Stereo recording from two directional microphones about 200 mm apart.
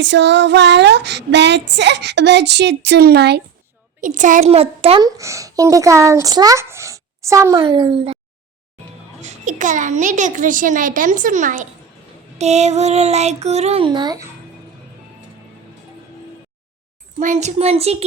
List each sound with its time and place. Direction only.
0.0 s child singing: 60° right (ahead or behind)
4.0 s a child's voice: 40° right (ahead or behind)
5.0 s a child's voice: 15° right (ahead or behind)
9.2 s a child's voice: 40° right (ahead or behind); by 14.3 s 20° right (ahead or behind)
17.2 s a child's voice: 35° right (ahead or behind)